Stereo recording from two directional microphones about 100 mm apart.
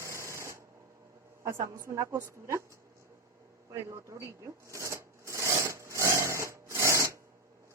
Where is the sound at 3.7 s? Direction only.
30° right (ahead or behind).